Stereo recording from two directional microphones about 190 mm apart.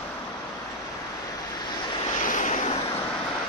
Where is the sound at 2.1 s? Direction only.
40° left (ahead or behind).